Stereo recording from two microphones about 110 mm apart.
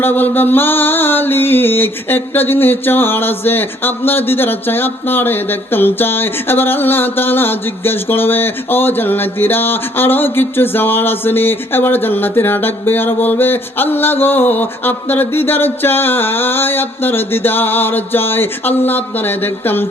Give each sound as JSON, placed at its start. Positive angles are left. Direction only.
{"t": 0.0, "sound": "mantra", "side_deg": 20}